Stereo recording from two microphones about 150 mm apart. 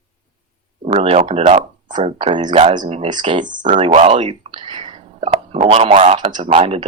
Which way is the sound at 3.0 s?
30° right (ahead or behind).